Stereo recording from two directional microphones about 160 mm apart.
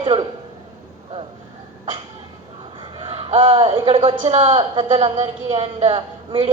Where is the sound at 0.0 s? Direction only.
30° right (ahead or behind).